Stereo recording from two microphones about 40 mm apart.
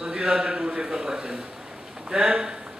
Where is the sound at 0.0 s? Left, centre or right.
Right.